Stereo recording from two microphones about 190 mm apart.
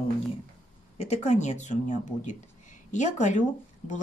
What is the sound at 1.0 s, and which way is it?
Speech, 35° left (ahead or behind).